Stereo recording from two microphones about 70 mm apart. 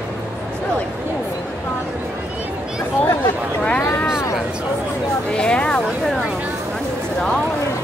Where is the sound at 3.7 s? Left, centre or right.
Left.